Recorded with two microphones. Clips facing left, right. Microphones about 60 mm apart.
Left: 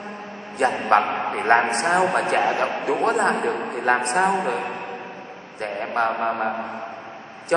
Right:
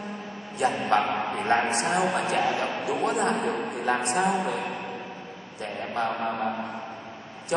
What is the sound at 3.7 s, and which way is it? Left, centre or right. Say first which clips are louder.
A man's voice: left 7 dB; left.